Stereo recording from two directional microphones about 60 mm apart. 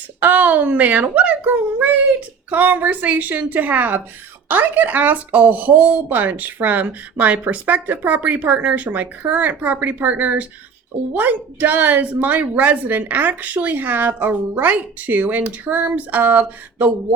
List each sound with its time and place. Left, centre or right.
0.2 s speech: right